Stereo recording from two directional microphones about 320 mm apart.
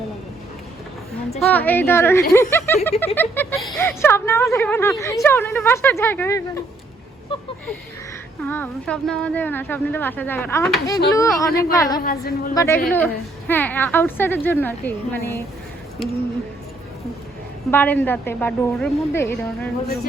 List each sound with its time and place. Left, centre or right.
1.4 s a woman's voice: centre
12.0 s a woman's voice: left
12.5 s speech: centre
17.7 s speech: centre